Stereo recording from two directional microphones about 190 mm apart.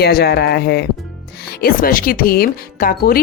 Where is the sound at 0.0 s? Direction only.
55° left (ahead or behind).